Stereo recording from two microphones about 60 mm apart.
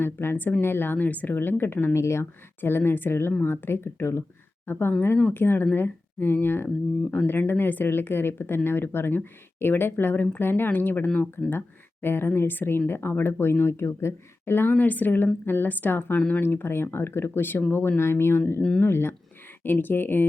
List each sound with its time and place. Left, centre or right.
0.0 s speech: left
2.0 s speech: left
2.6 s speech: left